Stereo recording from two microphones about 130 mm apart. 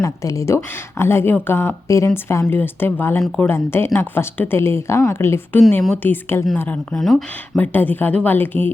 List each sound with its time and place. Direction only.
0.0 s a woman's voice: 25° left (ahead or behind)
6.9 s speech: centre (ahead or behind)
7.6 s a woman's voice: 15° left (ahead or behind)